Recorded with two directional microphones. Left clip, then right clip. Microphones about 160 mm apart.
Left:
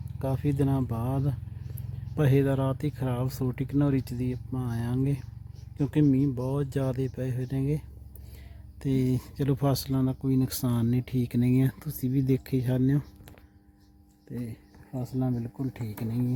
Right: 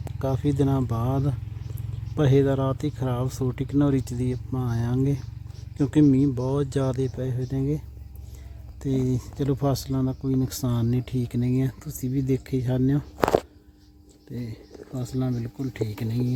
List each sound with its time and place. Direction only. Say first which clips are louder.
0.2 s speech: right 4 dB; 10° right (ahead or behind)
8.8 s speech: right 2 dB; centre (ahead or behind)
11.3 s speech: left 2 dB; 15° left (ahead or behind); by 13.1 s centre (ahead or behind)
14.9 s speech: right 2 dB; 5° left (ahead or behind)